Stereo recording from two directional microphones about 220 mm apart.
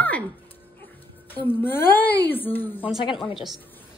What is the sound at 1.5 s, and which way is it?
A woman's voice, 10° left (ahead or behind).